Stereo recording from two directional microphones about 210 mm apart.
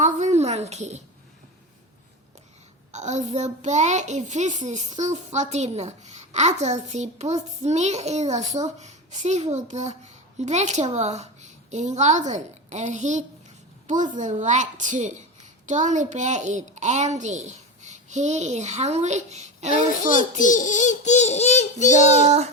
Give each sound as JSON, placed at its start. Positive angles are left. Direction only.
{"t": 0.0, "sound": "a sound", "side_deg": -35}
{"t": 2.9, "sound": "a child's voice", "side_deg": -35}
{"t": 20.1, "sound": "a child's voice", "side_deg": 40}
{"t": 22.2, "sound": "a child's voice", "side_deg": -30}